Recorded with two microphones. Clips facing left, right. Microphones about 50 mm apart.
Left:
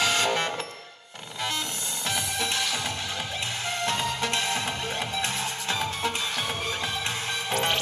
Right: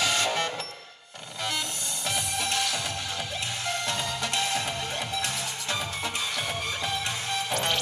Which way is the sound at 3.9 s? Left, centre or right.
Left.